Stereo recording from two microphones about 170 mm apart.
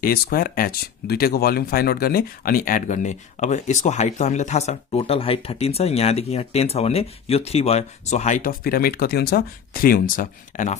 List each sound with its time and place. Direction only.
0.0 s speech: 60° left (ahead or behind)